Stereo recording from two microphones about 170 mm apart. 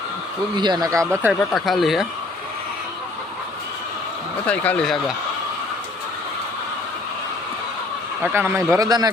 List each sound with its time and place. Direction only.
0.5 s speech: 25° right (ahead or behind)
1.3 s speech: centre (ahead or behind)
4.4 s speech: 10° left (ahead or behind)
8.2 s a man's voice: 10° right (ahead or behind)